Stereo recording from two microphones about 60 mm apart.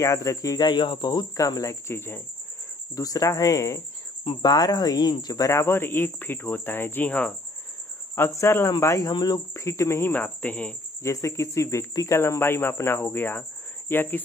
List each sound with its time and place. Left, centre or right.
0.0 s speech: left
1.3 s speech: left
1.9 s speech: left
3.0 s speech: left
4.5 s speech: left
5.8 s speech: left
7.1 s speech: left
8.3 s speech: left
9.5 s speech: left
11.0 s speech: left